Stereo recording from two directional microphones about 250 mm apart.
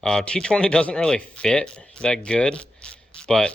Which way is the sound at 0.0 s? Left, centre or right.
Centre.